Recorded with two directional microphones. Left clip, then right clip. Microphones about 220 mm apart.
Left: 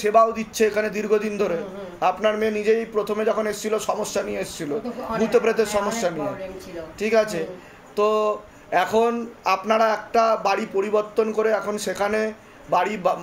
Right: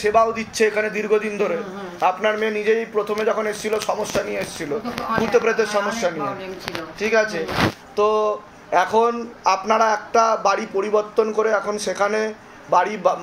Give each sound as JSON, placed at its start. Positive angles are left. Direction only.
{"t": 0.0, "sound": "a man's voice", "side_deg": 30}
{"t": 7.0, "sound": "a man's voice", "side_deg": 35}